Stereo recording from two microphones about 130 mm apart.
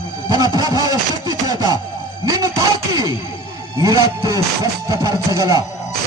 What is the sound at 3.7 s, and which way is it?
A man's voice, 25° right (ahead or behind).